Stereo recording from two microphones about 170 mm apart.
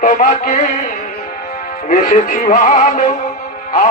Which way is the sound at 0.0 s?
50° left (ahead or behind).